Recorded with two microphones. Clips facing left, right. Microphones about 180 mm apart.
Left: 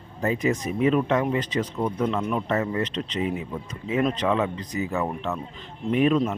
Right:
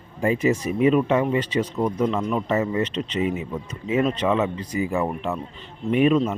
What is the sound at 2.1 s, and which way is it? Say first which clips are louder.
Speech: right 2 dB; centre (ahead or behind).